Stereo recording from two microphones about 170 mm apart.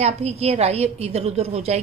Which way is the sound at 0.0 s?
40° right (ahead or behind).